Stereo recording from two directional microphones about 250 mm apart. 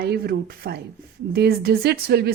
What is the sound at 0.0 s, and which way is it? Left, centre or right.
A woman's voice, right.